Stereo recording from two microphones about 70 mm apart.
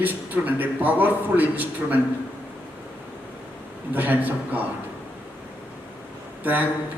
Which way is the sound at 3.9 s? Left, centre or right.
Right.